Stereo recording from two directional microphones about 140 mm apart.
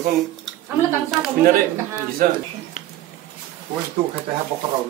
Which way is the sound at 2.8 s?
60° left (ahead or behind).